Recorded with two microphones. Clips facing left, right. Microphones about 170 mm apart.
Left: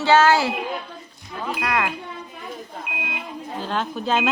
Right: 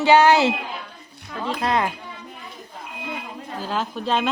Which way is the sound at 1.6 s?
25° right (ahead or behind).